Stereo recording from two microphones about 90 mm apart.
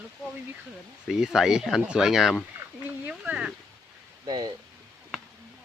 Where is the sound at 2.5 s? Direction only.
25° right (ahead or behind).